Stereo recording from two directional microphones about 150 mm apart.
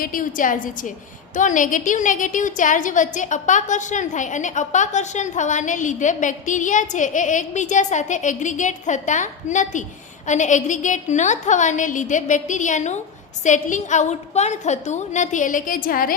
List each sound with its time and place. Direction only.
0.0 s a woman's voice: 65° left (ahead or behind)